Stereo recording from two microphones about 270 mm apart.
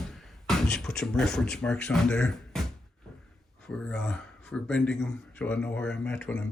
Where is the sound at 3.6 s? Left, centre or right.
Centre.